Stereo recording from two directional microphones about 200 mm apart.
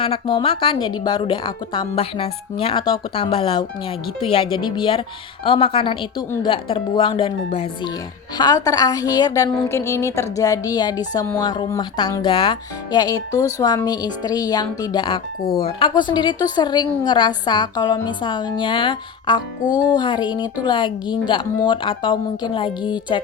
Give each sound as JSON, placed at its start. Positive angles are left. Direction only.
{"t": 0.0, "sound": "a woman's voice", "side_deg": 25}